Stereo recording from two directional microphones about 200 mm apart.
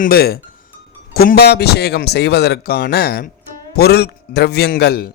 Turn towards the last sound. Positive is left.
turn(degrees=50)  # may be behind; listen again after turning